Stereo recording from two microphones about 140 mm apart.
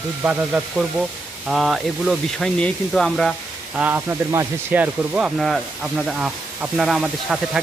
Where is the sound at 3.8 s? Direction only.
15° right (ahead or behind).